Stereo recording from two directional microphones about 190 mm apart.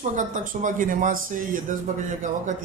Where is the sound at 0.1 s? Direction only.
45° right (ahead or behind).